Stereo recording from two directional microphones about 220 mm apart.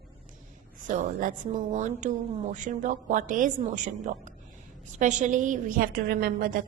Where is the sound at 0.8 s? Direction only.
35° right (ahead or behind).